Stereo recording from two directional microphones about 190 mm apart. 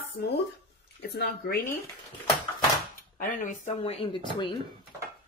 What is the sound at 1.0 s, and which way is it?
Speech, 60° left (ahead or behind).